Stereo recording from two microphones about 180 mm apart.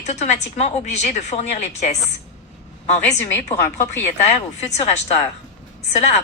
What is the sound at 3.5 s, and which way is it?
Speech, 15° left (ahead or behind).